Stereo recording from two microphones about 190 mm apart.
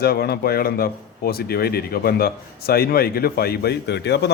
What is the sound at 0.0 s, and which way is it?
Speech, 55° left (ahead or behind).